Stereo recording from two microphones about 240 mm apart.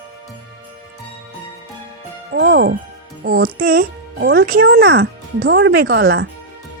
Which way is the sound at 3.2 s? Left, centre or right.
Right.